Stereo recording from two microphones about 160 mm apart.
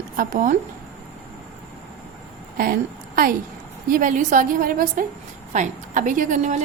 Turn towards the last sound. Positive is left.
turn(degrees=-50)  # may be behind; listen again after turning